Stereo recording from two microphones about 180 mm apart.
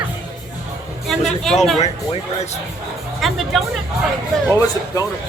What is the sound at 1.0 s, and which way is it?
Speech, centre (ahead or behind).